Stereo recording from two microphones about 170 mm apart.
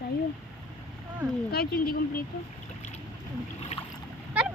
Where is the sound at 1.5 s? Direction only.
60° left (ahead or behind).